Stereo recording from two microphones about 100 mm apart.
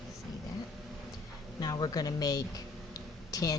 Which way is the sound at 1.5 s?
40° left (ahead or behind).